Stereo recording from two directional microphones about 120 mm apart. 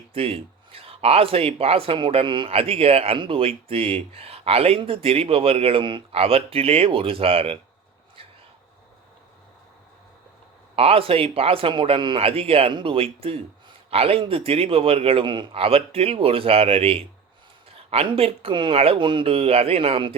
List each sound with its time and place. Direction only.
0.1 s speech: 50° right (ahead or behind)
10.8 s speech: 50° right (ahead or behind)